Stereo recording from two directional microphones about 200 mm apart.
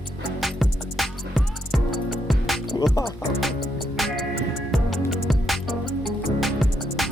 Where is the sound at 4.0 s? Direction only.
Centre (ahead or behind).